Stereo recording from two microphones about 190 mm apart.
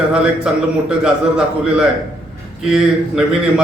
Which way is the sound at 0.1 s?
5° right (ahead or behind).